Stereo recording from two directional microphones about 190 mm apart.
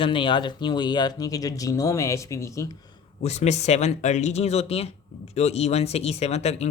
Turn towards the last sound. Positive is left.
turn(degrees=35)  # may be behind; listen again after turning